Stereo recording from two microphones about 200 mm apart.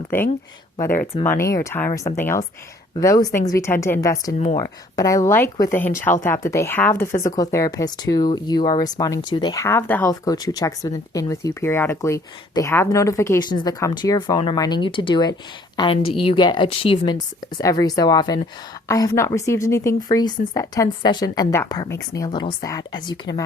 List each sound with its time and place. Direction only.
0.8 s speech: 10° left (ahead or behind)
4.3 s speech: 35° left (ahead or behind)
4.5 s speech: 20° left (ahead or behind)